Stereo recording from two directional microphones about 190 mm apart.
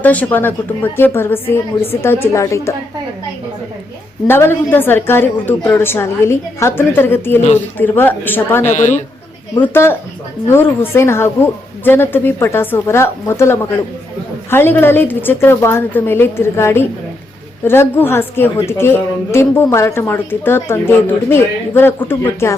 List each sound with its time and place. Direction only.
0.0 s a woman's voice: 10° left (ahead or behind)
4.3 s a woman's voice: 10° left (ahead or behind)
8.7 s speech: 40° left (ahead or behind)
9.6 s a woman's voice: 10° left (ahead or behind)